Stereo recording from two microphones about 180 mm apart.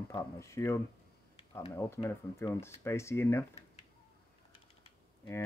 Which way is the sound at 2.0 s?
15° left (ahead or behind).